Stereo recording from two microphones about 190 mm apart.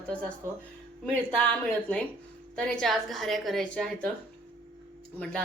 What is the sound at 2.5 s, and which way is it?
Speech, 5° left (ahead or behind).